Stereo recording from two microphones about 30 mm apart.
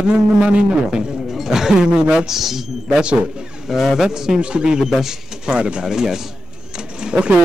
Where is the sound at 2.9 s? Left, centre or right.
Right.